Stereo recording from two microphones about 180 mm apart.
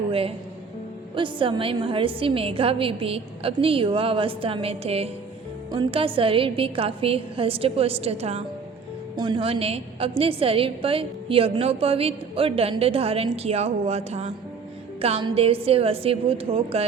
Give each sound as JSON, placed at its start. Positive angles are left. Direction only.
{"t": 0.1, "sound": "a woman's voice", "side_deg": -30}
{"t": 9.1, "sound": "a woman's voice", "side_deg": -25}